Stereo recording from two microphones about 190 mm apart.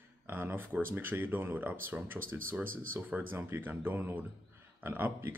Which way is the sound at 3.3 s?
10° right (ahead or behind).